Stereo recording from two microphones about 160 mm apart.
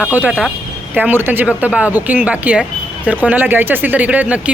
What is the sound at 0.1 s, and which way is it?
Speech, 10° right (ahead or behind).